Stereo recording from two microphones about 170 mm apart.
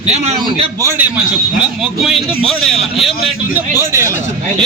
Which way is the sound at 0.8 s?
15° right (ahead or behind).